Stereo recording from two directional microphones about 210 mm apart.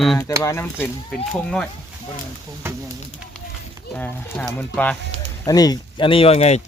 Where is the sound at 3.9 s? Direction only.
5° left (ahead or behind); by 6.6 s 30° left (ahead or behind).